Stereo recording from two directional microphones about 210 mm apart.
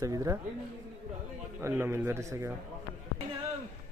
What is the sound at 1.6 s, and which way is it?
Speech, 10° right (ahead or behind).